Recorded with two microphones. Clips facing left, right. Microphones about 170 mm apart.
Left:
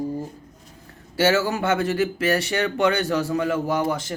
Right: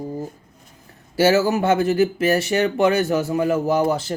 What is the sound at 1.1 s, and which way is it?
A man's voice, 25° right (ahead or behind).